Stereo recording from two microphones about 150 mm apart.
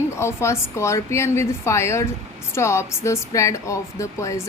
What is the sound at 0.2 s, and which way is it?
A woman's voice, 20° left (ahead or behind).